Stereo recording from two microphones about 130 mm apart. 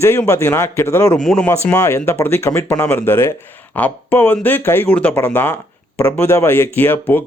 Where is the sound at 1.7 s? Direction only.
20° left (ahead or behind).